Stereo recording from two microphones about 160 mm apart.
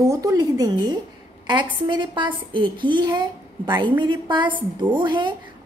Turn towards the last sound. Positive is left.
turn(degrees=-30)  # may be behind; listen again after turning